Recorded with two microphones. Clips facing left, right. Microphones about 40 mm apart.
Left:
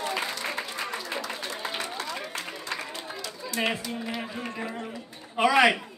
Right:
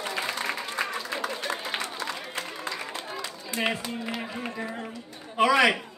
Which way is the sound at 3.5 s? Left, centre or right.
Right.